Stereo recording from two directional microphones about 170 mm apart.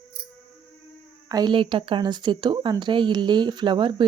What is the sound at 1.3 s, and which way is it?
Speech, 25° right (ahead or behind).